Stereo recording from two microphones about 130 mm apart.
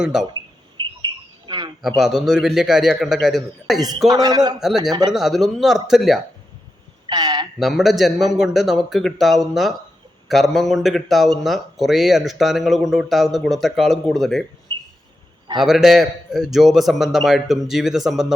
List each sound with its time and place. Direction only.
0.0 s speech: 5° right (ahead or behind)
1.5 s a sound: 35° right (ahead or behind)
2.0 s speech: centre (ahead or behind)
4.1 s a man's voice: 30° right (ahead or behind)
5.1 s speech: centre (ahead or behind)
7.1 s a sound: 30° right (ahead or behind)
7.6 s speech: centre (ahead or behind)
15.5 s speech: 5° right (ahead or behind)